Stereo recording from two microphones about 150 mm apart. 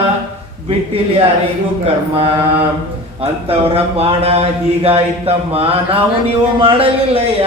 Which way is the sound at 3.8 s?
40° right (ahead or behind).